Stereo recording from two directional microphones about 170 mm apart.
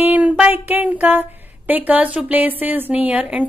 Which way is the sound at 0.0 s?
10° right (ahead or behind).